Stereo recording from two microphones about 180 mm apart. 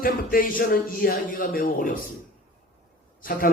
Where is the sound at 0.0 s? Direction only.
50° left (ahead or behind).